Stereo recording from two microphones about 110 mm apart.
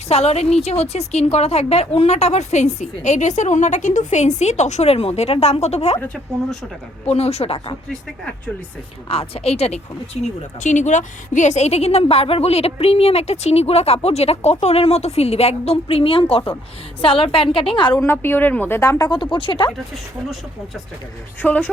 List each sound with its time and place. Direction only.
0.1 s a woman's voice: 70° left (ahead or behind)
7.0 s a woman's voice: 70° left (ahead or behind)
9.0 s speech: 60° left (ahead or behind)
10.6 s a woman's voice: 90° left; by 17.9 s 50° left (ahead or behind)
18.0 s speech: 20° left (ahead or behind)
18.8 s a woman's voice: 30° left (ahead or behind); by 19.7 s 50° left (ahead or behind)
21.4 s speech: 15° left (ahead or behind)